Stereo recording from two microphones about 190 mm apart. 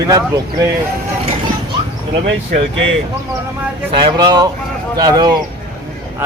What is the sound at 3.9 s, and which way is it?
Speech, 25° right (ahead or behind).